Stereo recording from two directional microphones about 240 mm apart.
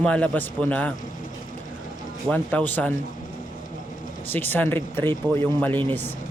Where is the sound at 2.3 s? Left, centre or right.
Centre.